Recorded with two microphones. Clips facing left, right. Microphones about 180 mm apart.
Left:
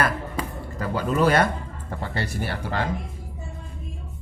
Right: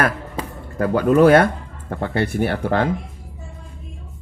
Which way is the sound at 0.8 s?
55° right (ahead or behind).